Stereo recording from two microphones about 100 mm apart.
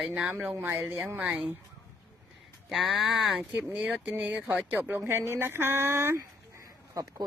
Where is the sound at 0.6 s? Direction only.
25° right (ahead or behind).